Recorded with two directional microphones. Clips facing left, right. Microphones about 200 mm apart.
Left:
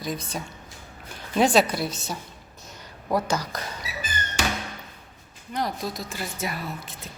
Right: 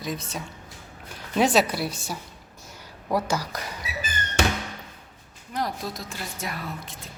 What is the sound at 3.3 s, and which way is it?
Speech, 10° right (ahead or behind).